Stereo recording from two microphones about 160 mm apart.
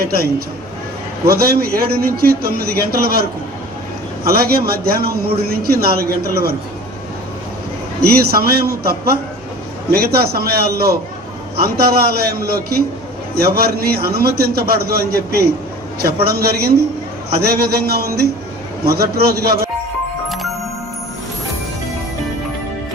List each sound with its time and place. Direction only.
0.0 s a man's voice: 70° right (ahead or behind)
8.0 s a man's voice: 75° right (ahead or behind)